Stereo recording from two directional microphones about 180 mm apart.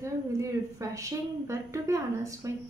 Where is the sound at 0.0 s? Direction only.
15° right (ahead or behind).